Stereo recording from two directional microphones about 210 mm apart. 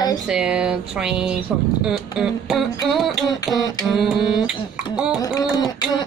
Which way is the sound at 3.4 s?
20° left (ahead or behind).